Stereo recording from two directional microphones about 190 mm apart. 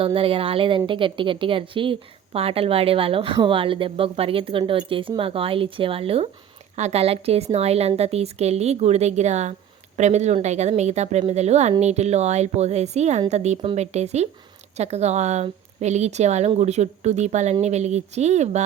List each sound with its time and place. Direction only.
0.0 s a woman's voice: 30° right (ahead or behind)